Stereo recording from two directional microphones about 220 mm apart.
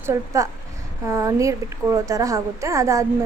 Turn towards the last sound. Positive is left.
turn(degrees=-15)  # may be behind; listen again after turning